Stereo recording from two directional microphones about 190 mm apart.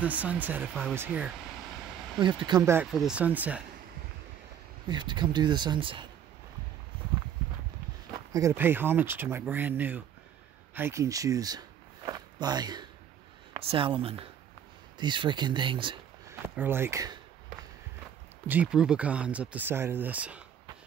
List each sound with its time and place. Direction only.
0.0 s speech: 10° right (ahead or behind)
2.1 s speech: 25° right (ahead or behind)
2.9 s speech: 5° right (ahead or behind)
4.8 s speech: 25° right (ahead or behind)
8.3 s speech: 15° right (ahead or behind)
12.1 s a sound: 20° right (ahead or behind)
13.5 s speech: 30° right (ahead or behind)
16.3 s speech: 10° right (ahead or behind)
18.5 s speech: 5° right (ahead or behind)